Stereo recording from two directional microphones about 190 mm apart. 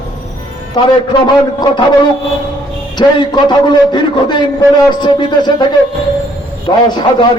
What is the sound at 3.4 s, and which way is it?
A man's voice, 25° left (ahead or behind).